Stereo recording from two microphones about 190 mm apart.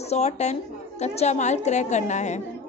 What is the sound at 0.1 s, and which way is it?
A woman's voice, 35° left (ahead or behind).